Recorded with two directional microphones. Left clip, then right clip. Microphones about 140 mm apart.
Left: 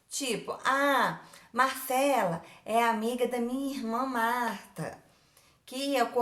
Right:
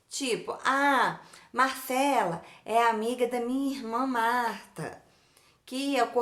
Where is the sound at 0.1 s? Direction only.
15° right (ahead or behind).